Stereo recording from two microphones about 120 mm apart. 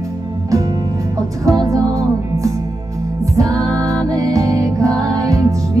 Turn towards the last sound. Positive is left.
turn(degrees=-30)  # may be behind; listen again after turning